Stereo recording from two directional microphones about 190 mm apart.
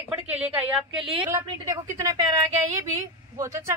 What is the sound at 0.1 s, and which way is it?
A woman's voice, 10° right (ahead or behind).